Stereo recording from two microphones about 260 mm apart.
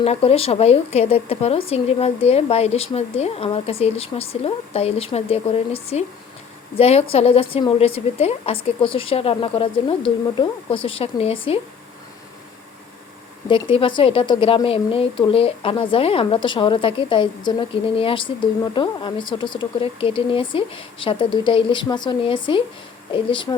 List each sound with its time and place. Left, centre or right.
0.0 s speech: left
13.5 s speech: centre